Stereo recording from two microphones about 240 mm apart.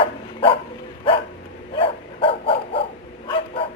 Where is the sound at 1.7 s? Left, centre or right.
Left.